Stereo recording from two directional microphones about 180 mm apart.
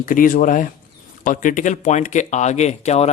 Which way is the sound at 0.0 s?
50° left (ahead or behind).